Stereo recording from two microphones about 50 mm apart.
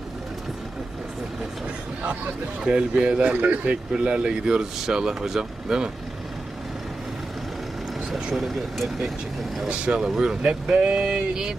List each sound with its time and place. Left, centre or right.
2.6 s speech: centre
8.4 s speech: centre
9.6 s speech: right
10.2 s speech: centre